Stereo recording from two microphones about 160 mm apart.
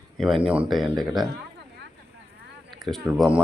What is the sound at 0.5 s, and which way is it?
Speech, 5° right (ahead or behind).